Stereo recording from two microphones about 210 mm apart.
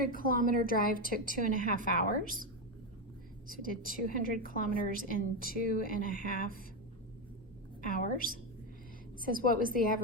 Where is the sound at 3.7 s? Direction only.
40° left (ahead or behind).